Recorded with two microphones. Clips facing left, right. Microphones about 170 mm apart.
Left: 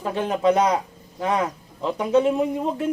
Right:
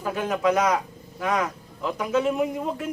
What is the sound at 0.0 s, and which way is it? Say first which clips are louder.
Speech: left 3 dB; 30° left (ahead or behind).